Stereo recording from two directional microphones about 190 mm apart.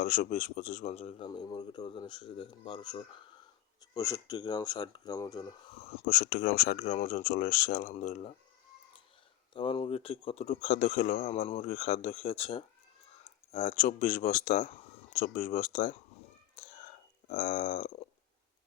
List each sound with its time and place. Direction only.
0.0 s speech: 45° left (ahead or behind)
1.3 s speech: 20° left (ahead or behind)
5.7 s speech: 35° left (ahead or behind)
9.5 s speech: 25° left (ahead or behind)
16.6 s cat: 40° left (ahead or behind)
17.2 s speech: 40° left (ahead or behind)